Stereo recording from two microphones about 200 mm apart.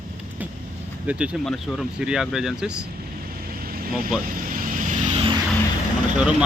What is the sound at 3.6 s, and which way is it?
Vehicle, 45° right (ahead or behind).